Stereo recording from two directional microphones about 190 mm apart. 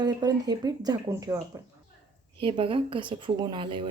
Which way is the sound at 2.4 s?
30° right (ahead or behind).